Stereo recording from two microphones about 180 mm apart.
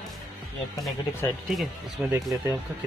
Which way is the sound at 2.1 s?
15° right (ahead or behind).